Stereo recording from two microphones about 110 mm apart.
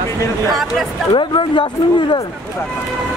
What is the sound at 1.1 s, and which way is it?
Speech, 50° left (ahead or behind).